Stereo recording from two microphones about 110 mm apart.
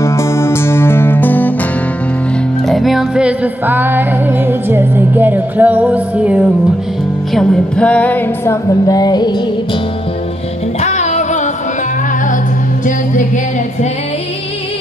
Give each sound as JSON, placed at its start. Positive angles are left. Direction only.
{"t": 0.0, "sound": "music", "side_deg": 25}
{"t": 2.6, "sound": "music", "side_deg": 0}
{"t": 7.3, "sound": "a woman's voice", "side_deg": 10}
{"t": 8.8, "sound": "music", "side_deg": 35}
{"t": 10.8, "sound": "music", "side_deg": 90}